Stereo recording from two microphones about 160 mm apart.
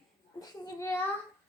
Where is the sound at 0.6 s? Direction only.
20° left (ahead or behind).